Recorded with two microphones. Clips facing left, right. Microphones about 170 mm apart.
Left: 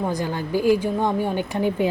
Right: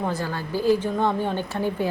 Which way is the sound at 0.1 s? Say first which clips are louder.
Left 3 dB; 15° left (ahead or behind).